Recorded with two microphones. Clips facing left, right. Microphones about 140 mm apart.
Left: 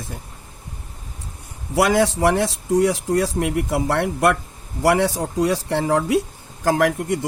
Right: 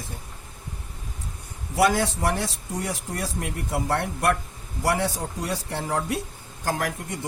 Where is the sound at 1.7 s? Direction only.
90° left.